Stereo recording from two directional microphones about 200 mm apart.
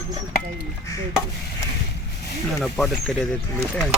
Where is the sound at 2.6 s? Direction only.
Centre (ahead or behind).